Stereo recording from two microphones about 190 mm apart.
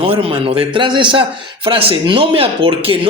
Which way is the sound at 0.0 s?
30° right (ahead or behind).